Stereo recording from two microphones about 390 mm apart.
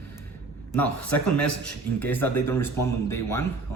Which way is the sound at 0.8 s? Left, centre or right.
Centre.